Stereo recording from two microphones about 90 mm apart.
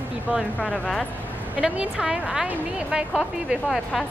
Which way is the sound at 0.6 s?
5° left (ahead or behind).